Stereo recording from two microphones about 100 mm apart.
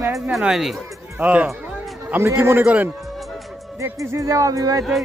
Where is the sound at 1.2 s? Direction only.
15° right (ahead or behind).